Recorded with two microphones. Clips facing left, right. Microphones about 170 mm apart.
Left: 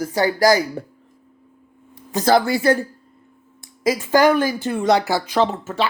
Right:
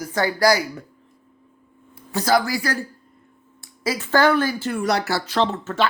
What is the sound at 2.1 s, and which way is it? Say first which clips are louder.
Speech: left 3 dB; 20° left (ahead or behind).